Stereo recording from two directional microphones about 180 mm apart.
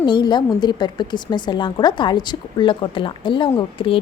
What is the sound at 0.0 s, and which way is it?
A woman's voice, 25° left (ahead or behind).